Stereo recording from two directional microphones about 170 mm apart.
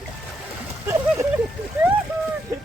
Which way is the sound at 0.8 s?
15° right (ahead or behind).